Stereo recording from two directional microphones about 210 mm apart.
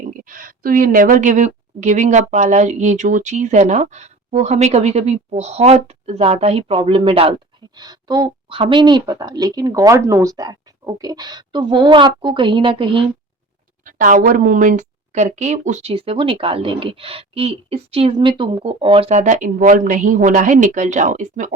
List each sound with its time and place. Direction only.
0.3 s a woman's voice: 40° right (ahead or behind); by 13.1 s 25° right (ahead or behind)
13.8 s a woman's voice: 40° right (ahead or behind)